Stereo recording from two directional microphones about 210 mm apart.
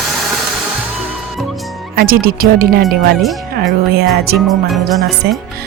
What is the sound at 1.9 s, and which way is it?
Speech, 45° right (ahead or behind).